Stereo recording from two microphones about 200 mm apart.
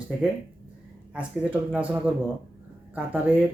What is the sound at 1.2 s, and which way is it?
Speech, 5° right (ahead or behind).